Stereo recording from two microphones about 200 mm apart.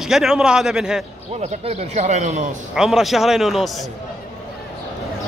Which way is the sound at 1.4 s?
35° right (ahead or behind).